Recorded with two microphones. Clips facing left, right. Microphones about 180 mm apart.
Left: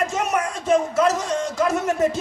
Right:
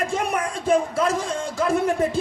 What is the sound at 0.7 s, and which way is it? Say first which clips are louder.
Speech: left 2 dB; 30° right (ahead or behind).